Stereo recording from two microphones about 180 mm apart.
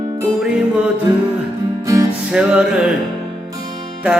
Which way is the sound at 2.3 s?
5° right (ahead or behind).